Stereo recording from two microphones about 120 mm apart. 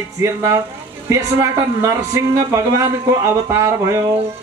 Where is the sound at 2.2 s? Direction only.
20° right (ahead or behind).